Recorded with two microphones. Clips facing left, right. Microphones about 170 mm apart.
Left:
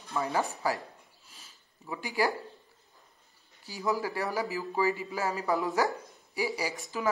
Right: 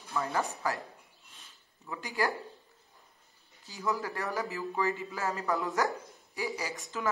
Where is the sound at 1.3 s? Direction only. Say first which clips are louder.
Left 1 dB; 10° left (ahead or behind).